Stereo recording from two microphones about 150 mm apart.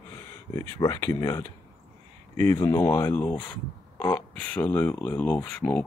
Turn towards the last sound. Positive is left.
turn(degrees=5)  # may be behind; listen again after turning